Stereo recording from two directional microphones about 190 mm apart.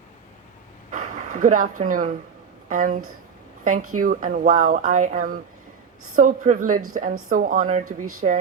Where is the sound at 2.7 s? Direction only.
40° right (ahead or behind).